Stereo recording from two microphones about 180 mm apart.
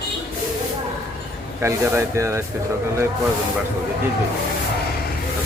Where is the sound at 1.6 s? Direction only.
15° right (ahead or behind).